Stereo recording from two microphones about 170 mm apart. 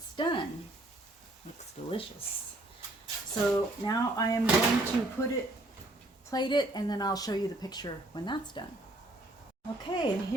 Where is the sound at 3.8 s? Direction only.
20° left (ahead or behind).